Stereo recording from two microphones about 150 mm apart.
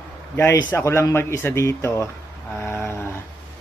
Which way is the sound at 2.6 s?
15° left (ahead or behind).